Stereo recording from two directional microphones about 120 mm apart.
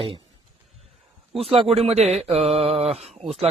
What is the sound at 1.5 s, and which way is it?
Speech, 55° right (ahead or behind).